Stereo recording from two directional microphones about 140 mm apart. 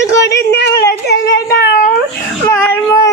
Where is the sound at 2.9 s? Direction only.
25° left (ahead or behind).